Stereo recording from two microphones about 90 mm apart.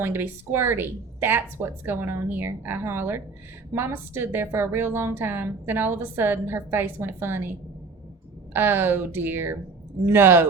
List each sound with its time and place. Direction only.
0.0 s a woman's voice: 25° right (ahead or behind)
8.5 s a woman's voice: 25° right (ahead or behind)